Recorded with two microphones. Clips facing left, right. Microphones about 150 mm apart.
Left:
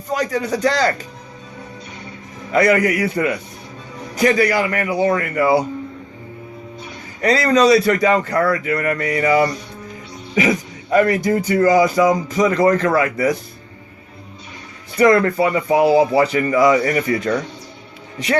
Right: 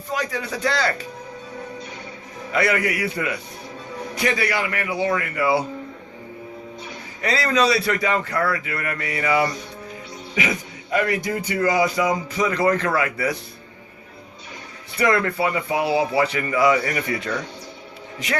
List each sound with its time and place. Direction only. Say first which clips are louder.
0.1 s speech: left 6 dB; 40° left (ahead or behind)
2.5 s speech: left 7 dB; 40° left (ahead or behind)
7.2 s a man's voice: left 6 dB; 45° left (ahead or behind)
10.9 s speech: left 7 dB; 45° left (ahead or behind)
14.9 s speech: left 7 dB; 40° left (ahead or behind)